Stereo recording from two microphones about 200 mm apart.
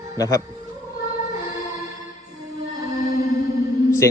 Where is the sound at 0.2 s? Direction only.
15° left (ahead or behind).